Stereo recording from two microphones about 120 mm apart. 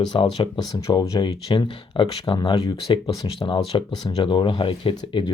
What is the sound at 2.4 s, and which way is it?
Speech, 30° left (ahead or behind).